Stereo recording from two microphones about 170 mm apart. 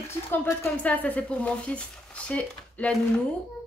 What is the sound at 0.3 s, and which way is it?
A woman's voice, 15° left (ahead or behind).